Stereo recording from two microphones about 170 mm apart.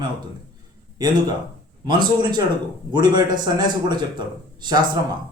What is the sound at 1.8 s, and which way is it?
Speech, 25° right (ahead or behind).